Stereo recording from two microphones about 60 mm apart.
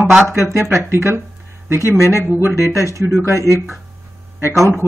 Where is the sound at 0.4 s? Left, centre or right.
Right.